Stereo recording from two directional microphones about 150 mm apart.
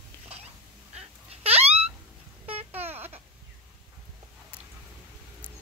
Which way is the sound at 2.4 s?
40° right (ahead or behind).